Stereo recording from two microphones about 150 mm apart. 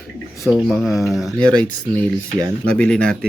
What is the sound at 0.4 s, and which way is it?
Speech, centre (ahead or behind).